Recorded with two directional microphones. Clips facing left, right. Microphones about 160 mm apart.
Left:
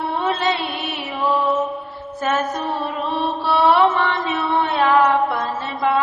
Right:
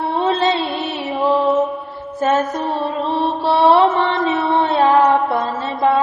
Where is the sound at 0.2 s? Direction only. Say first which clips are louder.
Right 6 dB; 30° right (ahead or behind).